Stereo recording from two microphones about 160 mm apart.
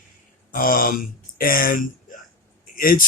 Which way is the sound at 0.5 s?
60° left (ahead or behind).